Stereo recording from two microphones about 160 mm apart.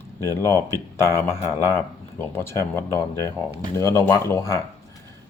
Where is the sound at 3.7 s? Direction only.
15° left (ahead or behind).